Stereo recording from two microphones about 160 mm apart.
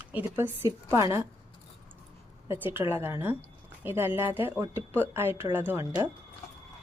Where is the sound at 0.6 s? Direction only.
15° right (ahead or behind).